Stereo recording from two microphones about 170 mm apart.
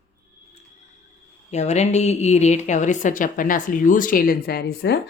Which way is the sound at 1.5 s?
40° left (ahead or behind).